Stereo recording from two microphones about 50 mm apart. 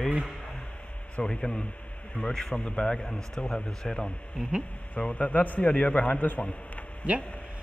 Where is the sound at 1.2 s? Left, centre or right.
Left.